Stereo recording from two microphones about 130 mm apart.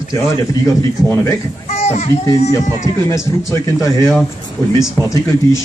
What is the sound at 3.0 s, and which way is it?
Speech, 25° left (ahead or behind).